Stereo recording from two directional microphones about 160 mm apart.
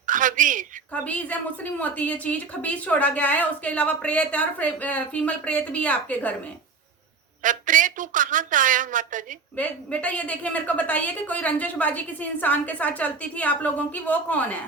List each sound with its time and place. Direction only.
0.1 s a sound: 55° right (ahead or behind)
1.0 s a woman's voice: 10° left (ahead or behind)
7.4 s a woman's voice: 55° right (ahead or behind)
9.6 s a woman's voice: 10° left (ahead or behind)